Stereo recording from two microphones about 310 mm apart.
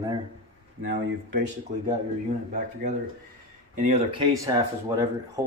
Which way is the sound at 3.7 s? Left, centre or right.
Right.